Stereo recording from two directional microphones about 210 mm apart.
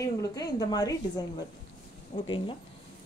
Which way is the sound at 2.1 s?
20° left (ahead or behind).